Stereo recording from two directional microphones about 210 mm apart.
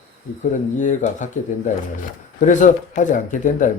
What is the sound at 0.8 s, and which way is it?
Speech, 35° left (ahead or behind).